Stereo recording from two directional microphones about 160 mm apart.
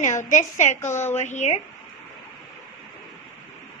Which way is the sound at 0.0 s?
50° left (ahead or behind).